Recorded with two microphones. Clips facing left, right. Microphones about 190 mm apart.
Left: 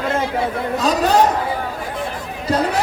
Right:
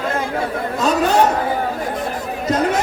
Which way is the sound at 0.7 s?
35° left (ahead or behind).